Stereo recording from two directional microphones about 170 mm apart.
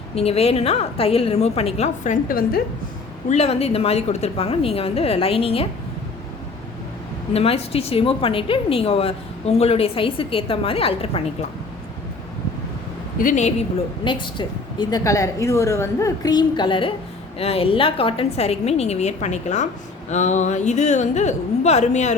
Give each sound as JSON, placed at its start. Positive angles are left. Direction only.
{"t": 0.2, "sound": "a woman's voice", "side_deg": 35}
{"t": 2.2, "sound": "a woman's voice", "side_deg": 55}
{"t": 3.2, "sound": "a woman's voice", "side_deg": 40}
{"t": 7.3, "sound": "a woman's voice", "side_deg": 35}
{"t": 13.1, "sound": "a woman's voice", "side_deg": 50}
{"t": 14.0, "sound": "a woman's voice", "side_deg": 30}